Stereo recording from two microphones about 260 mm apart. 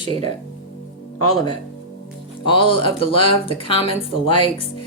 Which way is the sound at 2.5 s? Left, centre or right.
Centre.